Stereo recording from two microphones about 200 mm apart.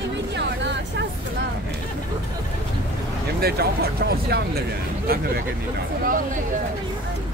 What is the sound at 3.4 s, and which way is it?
Speech, 50° right (ahead or behind).